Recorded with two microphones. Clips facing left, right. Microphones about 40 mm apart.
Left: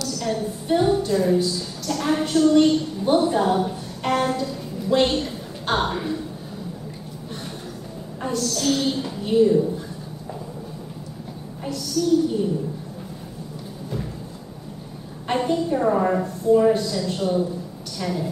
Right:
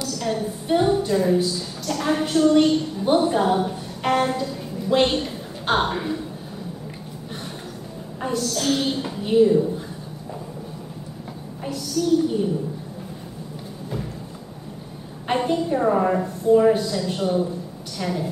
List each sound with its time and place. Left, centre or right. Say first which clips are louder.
0.0 s a woman's voice: even; centre
8.2 s a woman's voice: even; centre
12.0 s a woman's voice: even; centre
15.2 s a woman's voice: even; centre